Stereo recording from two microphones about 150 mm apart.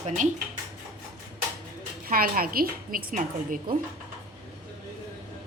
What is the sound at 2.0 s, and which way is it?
A woman's voice, 70° right (ahead or behind).